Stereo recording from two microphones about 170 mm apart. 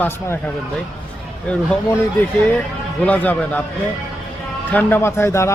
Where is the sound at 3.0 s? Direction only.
10° left (ahead or behind).